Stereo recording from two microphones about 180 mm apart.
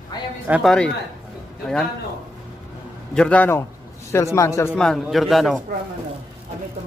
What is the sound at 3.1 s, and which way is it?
A man's voice, 5° left (ahead or behind).